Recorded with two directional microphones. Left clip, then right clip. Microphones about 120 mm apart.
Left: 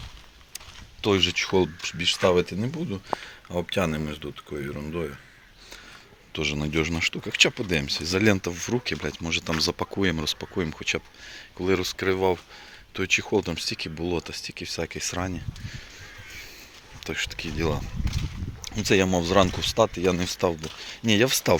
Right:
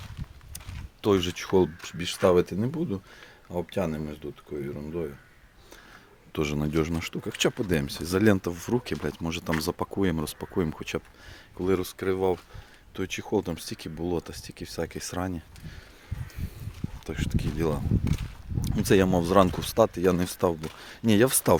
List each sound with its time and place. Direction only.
1.0 s speech: 40° right (ahead or behind)
3.2 s speech: 10° right (ahead or behind)
6.3 s speech: 90° right
6.6 s speech: 40° right (ahead or behind); by 9.5 s 60° right (ahead or behind)
9.6 s speech: 40° right (ahead or behind)
10.6 s speech: 60° right (ahead or behind)
11.5 s speech: 30° right (ahead or behind)
17.0 s speech: 20° right (ahead or behind)
18.7 s speech: 55° right (ahead or behind)
19.5 s speech: 65° right (ahead or behind)
20.8 s speech: 65° right (ahead or behind)